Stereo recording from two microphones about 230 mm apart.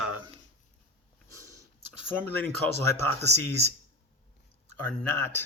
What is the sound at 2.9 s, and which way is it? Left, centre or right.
Speech, centre.